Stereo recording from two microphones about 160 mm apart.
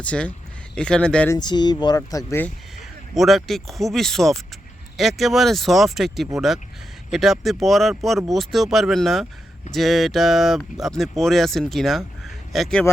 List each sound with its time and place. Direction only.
0.0 s speech: 10° left (ahead or behind)
1.3 s speech: 25° left (ahead or behind)
3.2 s speech: centre (ahead or behind)